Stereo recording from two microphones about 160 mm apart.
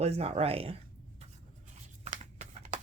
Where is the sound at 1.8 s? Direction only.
45° right (ahead or behind).